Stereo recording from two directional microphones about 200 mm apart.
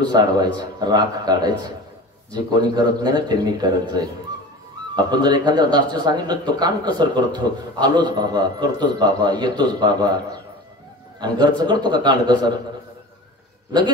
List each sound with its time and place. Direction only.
0.0 s speech: 20° right (ahead or behind)
2.5 s speech: 20° right (ahead or behind)